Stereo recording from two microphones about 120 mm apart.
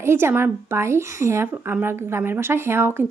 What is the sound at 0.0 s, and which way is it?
Speech, 20° right (ahead or behind).